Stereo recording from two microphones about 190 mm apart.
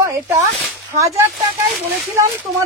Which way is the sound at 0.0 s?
15° right (ahead or behind).